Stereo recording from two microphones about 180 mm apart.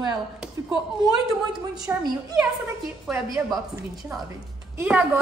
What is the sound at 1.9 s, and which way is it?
Speech, 10° right (ahead or behind).